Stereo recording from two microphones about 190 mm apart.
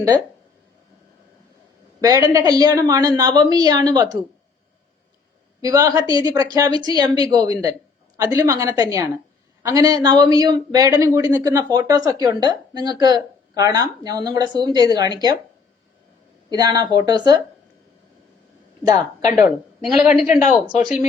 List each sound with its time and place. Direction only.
2.0 s speech: 20° right (ahead or behind)
5.6 s speech: 20° right (ahead or behind)
16.5 s speech: 20° right (ahead or behind)
19.8 s speech: centre (ahead or behind)